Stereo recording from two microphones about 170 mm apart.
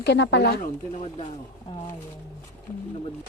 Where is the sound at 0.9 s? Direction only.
40° left (ahead or behind).